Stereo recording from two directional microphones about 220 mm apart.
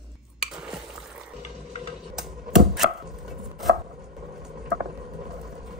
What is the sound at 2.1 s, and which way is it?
Chopping, centre (ahead or behind).